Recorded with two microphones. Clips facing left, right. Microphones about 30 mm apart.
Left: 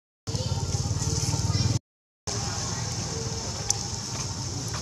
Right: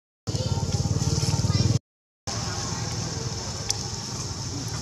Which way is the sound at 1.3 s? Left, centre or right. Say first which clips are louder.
Right 3 dB; centre.